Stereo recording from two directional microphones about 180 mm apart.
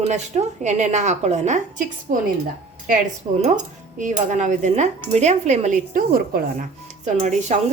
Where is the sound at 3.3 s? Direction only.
35° right (ahead or behind); by 6.6 s 55° right (ahead or behind).